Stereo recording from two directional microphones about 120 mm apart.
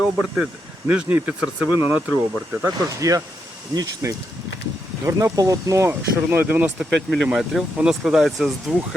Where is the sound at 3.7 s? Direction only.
35° right (ahead or behind); by 6.8 s 10° right (ahead or behind).